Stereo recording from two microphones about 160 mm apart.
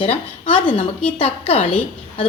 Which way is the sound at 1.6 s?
10° left (ahead or behind).